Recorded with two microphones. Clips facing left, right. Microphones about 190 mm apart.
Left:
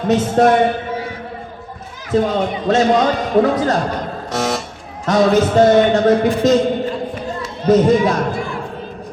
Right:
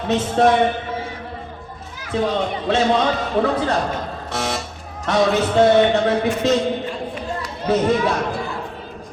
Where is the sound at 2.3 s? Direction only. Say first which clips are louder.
Left 4 dB; 40° left (ahead or behind).